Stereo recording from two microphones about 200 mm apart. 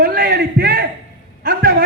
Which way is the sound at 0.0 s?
50° right (ahead or behind).